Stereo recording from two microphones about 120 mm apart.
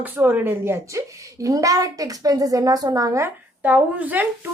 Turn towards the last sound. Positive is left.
turn(degrees=-15)  # may be behind; listen again after turning